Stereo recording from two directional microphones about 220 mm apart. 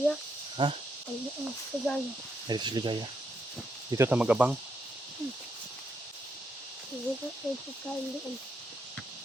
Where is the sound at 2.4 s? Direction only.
20° right (ahead or behind).